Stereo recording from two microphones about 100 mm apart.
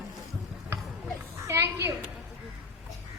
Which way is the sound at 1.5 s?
25° right (ahead or behind).